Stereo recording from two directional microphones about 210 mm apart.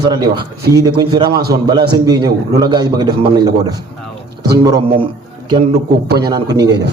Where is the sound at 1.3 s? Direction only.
50° right (ahead or behind).